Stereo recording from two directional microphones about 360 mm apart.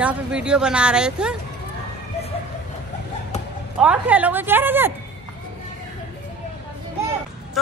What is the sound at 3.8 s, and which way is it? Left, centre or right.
A woman's voice, centre.